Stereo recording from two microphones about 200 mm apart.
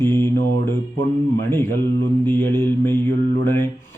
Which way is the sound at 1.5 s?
10° left (ahead or behind).